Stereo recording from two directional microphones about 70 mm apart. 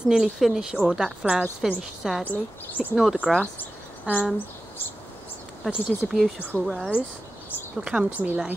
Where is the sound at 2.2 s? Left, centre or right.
Left.